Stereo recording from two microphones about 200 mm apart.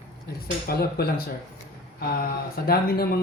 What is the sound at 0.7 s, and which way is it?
Speech, 50° left (ahead or behind).